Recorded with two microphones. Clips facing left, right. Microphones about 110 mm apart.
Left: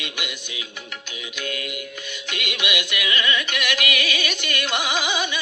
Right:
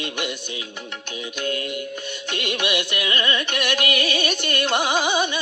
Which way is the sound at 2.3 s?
35° right (ahead or behind).